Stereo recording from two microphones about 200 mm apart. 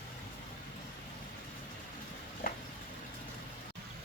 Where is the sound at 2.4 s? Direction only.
45° left (ahead or behind).